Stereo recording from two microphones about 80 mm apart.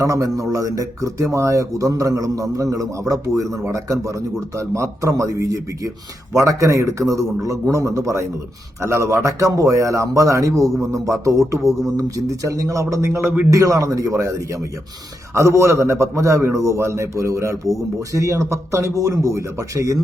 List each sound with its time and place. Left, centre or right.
0.0 s a man's voice: right